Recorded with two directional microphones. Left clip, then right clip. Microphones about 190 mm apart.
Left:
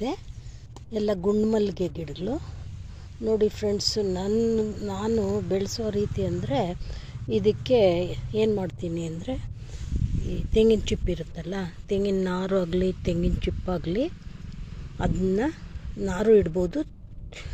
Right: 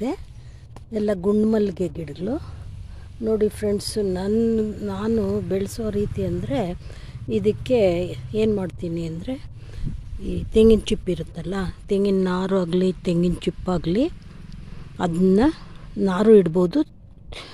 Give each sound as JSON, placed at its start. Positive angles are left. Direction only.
{"t": 0.9, "sound": "speech", "side_deg": -20}
{"t": 10.2, "sound": "speech", "side_deg": -35}